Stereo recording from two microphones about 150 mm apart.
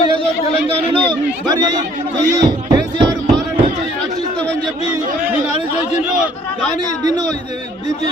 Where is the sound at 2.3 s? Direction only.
25° right (ahead or behind).